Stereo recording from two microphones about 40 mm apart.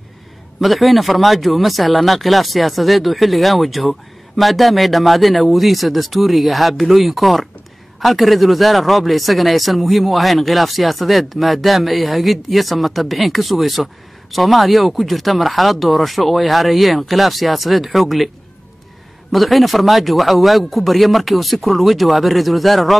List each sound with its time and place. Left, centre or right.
0.6 s speech: centre
19.3 s speech: centre